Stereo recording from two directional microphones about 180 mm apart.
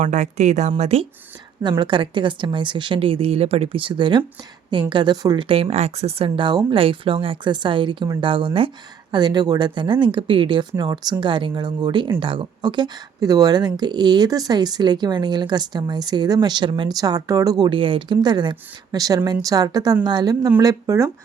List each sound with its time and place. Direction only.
0.0 s speech: 40° right (ahead or behind); by 21.1 s 15° right (ahead or behind)